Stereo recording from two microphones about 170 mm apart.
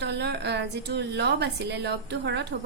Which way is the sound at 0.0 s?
85° right.